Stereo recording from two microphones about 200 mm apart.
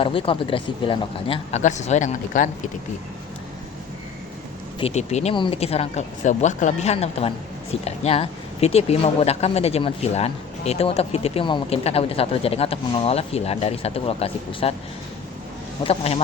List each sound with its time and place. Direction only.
0.0 s speech: 25° left (ahead or behind)
4.8 s speech: 35° left (ahead or behind)
15.8 s speech: 30° left (ahead or behind)